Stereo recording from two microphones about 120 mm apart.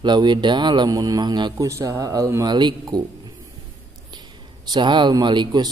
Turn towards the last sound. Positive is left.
turn(degrees=-40)  # may be behind; listen again after turning